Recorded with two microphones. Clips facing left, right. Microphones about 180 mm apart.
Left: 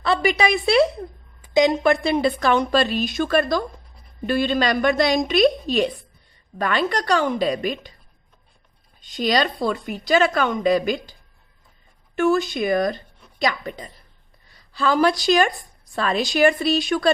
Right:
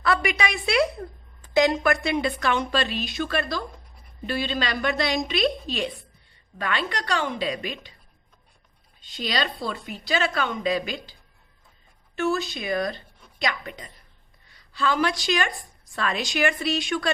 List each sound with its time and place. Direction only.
0.0 s a woman's voice: 30° left (ahead or behind)
1.4 s a woman's voice: 20° left (ahead or behind); by 7.9 s 45° left (ahead or behind)
9.0 s a woman's voice: 45° left (ahead or behind)
12.1 s a woman's voice: 50° left (ahead or behind)